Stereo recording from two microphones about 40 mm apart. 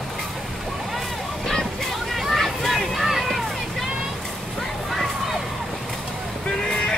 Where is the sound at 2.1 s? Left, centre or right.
Centre.